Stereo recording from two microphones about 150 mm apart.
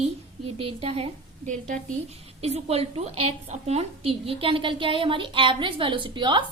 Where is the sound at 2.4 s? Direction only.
45° right (ahead or behind).